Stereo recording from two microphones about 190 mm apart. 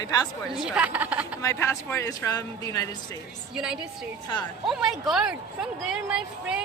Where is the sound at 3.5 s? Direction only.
5° right (ahead or behind).